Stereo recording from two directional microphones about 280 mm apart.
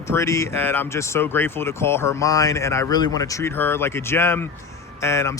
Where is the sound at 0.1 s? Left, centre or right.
Centre.